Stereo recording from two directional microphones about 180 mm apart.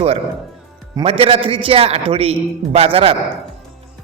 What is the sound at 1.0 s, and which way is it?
A man's voice, 30° right (ahead or behind).